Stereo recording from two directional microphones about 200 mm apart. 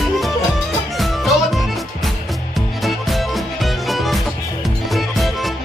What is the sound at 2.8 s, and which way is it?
Music, centre (ahead or behind).